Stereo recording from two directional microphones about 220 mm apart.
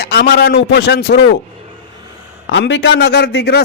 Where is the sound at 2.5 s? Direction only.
55° left (ahead or behind).